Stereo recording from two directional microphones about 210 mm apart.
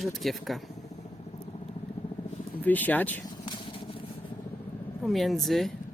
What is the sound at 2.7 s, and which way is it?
Speech, 10° left (ahead or behind).